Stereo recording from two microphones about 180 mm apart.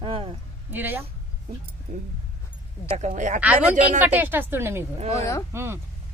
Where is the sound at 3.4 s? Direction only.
5° right (ahead or behind).